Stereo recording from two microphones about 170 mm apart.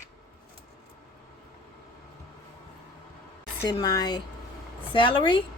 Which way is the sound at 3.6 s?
25° left (ahead or behind).